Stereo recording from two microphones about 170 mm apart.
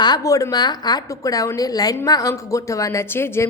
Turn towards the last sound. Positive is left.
turn(degrees=15)  # may be behind; listen again after turning